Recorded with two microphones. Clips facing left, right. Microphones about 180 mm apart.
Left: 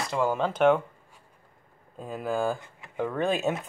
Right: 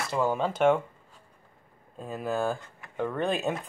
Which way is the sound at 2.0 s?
Centre (ahead or behind).